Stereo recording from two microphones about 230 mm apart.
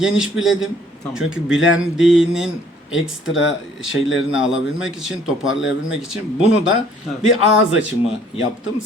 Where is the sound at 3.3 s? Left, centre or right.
Left.